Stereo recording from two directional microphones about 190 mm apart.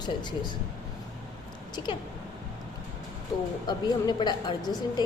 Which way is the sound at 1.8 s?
25° left (ahead or behind).